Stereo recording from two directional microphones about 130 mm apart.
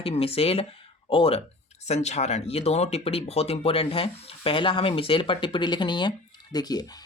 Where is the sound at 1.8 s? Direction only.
60° left (ahead or behind).